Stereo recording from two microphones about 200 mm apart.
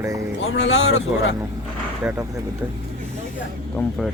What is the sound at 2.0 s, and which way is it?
Speech, 15° right (ahead or behind).